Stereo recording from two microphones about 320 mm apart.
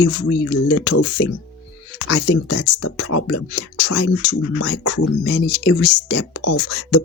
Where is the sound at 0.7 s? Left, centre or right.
Left.